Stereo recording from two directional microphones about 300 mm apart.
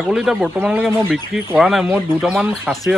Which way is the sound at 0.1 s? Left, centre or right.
Centre.